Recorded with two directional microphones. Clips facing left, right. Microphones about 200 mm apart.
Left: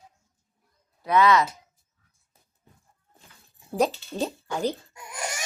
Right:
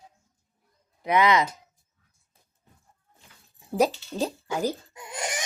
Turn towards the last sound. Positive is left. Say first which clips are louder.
# right 2 dB
turn(degrees=-20)  # may be behind; listen again after turning